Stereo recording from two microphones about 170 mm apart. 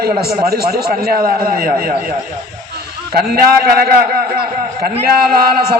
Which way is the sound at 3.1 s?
65° right (ahead or behind).